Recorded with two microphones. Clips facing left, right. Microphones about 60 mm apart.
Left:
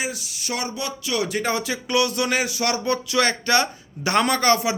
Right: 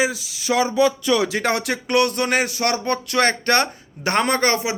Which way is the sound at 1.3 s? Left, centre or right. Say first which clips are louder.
Right 2 dB; right.